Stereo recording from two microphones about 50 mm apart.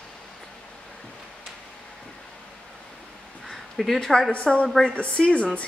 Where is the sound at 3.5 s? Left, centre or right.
Centre.